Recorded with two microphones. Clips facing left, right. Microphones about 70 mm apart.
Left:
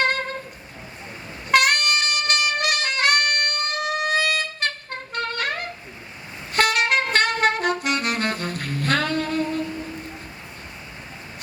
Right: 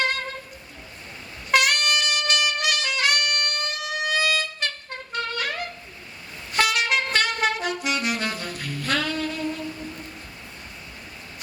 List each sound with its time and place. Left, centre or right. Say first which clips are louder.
0.0 s a sound: left 3 dB; left
1.5 s saxophone: left 2 dB; left
6.5 s music: left 2 dB; left
7.9 s saxophone: left 2 dB; left